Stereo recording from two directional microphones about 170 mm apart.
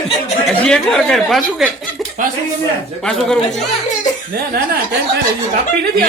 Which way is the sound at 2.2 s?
50° right (ahead or behind).